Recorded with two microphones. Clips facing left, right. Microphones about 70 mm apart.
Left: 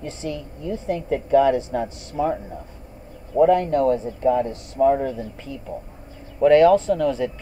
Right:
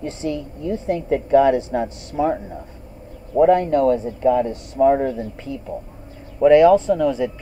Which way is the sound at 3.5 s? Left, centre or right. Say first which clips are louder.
Right 2 dB; centre.